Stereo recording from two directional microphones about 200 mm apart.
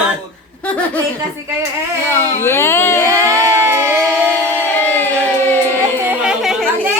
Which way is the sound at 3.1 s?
15° right (ahead or behind).